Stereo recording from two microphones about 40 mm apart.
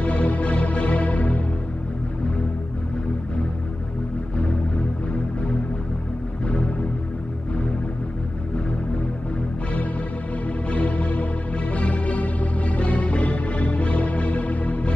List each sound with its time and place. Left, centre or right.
0.0 s music: left
10.7 s music: left